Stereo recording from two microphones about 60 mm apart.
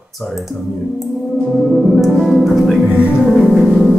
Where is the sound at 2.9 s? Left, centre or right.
Right.